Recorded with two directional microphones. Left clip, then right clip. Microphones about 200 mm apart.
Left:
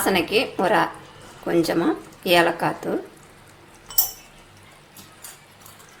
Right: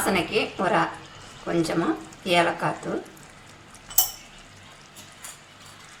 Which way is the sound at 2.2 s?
40° left (ahead or behind).